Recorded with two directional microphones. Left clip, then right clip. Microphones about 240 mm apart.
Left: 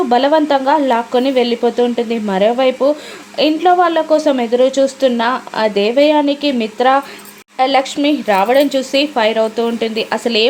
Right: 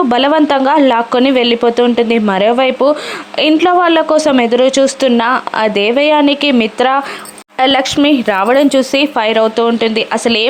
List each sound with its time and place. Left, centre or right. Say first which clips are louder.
0.1 s a woman's voice: left 2 dB; right